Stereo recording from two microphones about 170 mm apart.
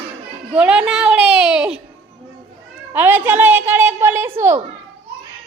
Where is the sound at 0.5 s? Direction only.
5° right (ahead or behind).